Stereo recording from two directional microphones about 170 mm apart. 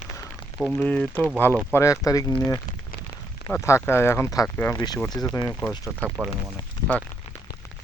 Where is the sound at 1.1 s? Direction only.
10° right (ahead or behind).